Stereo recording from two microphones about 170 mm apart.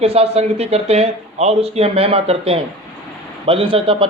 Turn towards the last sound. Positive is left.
turn(degrees=-30)  # may be behind; listen again after turning